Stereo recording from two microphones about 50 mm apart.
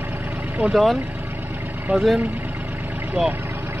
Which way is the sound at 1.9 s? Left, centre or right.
Right.